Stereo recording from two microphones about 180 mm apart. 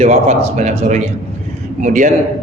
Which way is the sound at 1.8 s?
45° right (ahead or behind).